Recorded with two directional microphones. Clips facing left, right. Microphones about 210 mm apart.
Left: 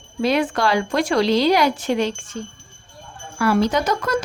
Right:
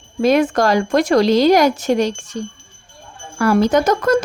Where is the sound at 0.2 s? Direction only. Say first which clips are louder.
Right 5 dB; 45° right (ahead or behind).